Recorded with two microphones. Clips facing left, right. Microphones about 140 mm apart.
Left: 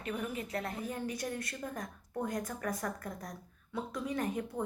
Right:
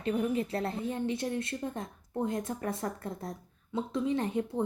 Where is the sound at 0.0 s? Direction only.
30° right (ahead or behind).